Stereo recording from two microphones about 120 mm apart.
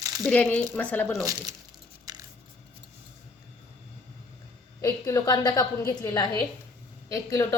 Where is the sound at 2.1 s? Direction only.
35° right (ahead or behind).